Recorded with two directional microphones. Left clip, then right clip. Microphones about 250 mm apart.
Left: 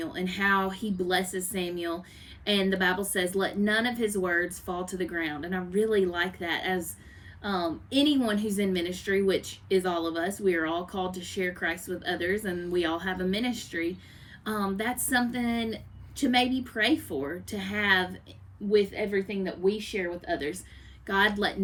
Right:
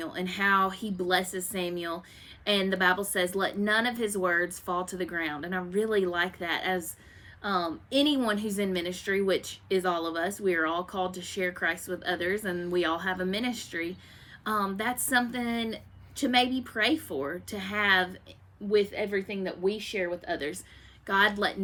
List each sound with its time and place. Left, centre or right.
0.0 s a woman's voice: centre